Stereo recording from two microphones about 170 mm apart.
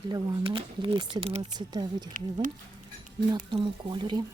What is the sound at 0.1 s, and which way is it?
Speech, 30° right (ahead or behind).